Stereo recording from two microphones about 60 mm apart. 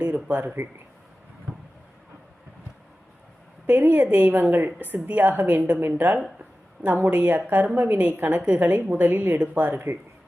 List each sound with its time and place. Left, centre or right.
0.0 s speech: right
3.7 s a woman's voice: right